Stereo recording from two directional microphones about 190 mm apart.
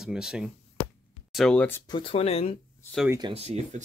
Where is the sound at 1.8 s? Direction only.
25° left (ahead or behind).